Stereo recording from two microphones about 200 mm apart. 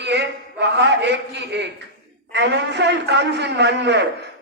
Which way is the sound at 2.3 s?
60° right (ahead or behind).